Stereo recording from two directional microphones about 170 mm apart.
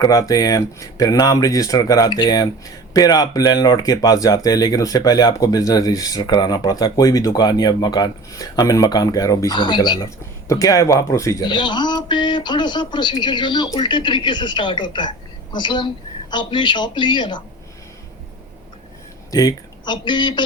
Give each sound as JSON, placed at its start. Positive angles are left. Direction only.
{"t": 0.0, "sound": "speech", "side_deg": 20}
{"t": 19.3, "sound": "speech", "side_deg": 20}